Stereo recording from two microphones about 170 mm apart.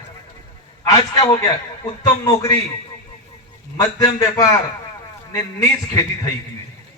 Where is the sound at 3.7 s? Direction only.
20° left (ahead or behind).